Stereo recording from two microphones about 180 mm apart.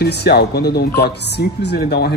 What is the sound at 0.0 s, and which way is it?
Speech, 65° left (ahead or behind).